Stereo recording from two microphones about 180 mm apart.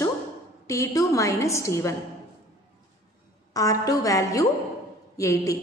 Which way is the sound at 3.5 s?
20° left (ahead or behind).